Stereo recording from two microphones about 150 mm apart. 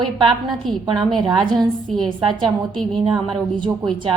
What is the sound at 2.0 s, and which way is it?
Speech, 30° right (ahead or behind).